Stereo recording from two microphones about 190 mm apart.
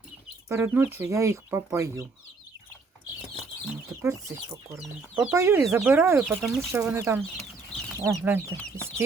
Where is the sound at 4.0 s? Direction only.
15° right (ahead or behind).